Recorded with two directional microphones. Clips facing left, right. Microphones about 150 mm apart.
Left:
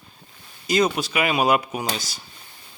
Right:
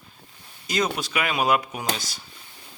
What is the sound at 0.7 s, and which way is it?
Speech, 5° left (ahead or behind).